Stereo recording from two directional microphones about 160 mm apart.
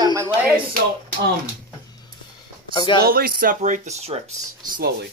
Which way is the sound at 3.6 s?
50° right (ahead or behind).